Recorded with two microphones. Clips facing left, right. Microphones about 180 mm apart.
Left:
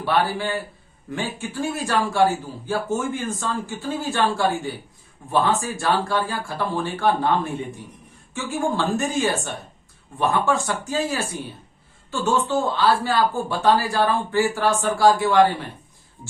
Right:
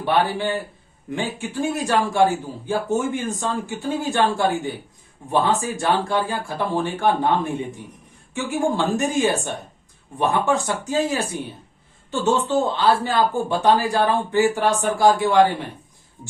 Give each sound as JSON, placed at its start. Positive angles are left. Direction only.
{"t": 0.0, "sound": "a man's voice", "side_deg": -20}